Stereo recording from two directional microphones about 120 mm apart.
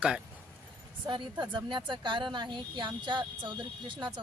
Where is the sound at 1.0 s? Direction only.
45° right (ahead or behind).